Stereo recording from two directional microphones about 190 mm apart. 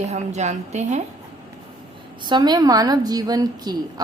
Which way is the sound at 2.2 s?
20° right (ahead or behind).